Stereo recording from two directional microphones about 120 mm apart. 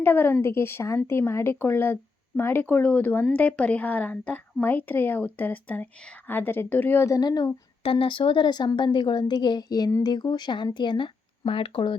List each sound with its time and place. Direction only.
0.0 s a woman's voice: 15° left (ahead or behind); by 7.5 s 35° left (ahead or behind)
7.9 s a woman's voice: 50° left (ahead or behind)